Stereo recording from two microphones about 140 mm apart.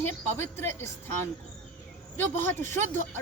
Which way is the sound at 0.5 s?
15° left (ahead or behind).